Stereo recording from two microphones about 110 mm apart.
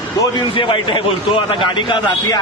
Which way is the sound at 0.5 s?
45° left (ahead or behind).